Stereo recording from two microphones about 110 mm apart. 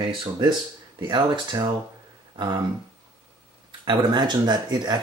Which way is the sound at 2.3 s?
45° right (ahead or behind).